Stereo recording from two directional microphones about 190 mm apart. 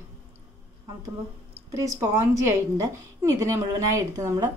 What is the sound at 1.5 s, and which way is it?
A woman's voice, 15° right (ahead or behind).